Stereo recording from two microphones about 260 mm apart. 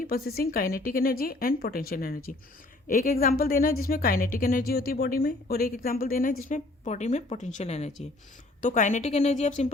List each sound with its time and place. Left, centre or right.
0.0 s a woman's voice: left